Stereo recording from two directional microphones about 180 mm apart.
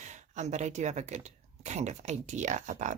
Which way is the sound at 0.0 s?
40° right (ahead or behind).